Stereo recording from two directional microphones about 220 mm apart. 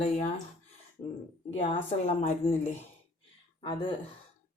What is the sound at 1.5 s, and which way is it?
A woman's voice, 30° left (ahead or behind).